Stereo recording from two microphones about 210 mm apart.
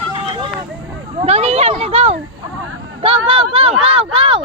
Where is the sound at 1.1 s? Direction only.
30° right (ahead or behind).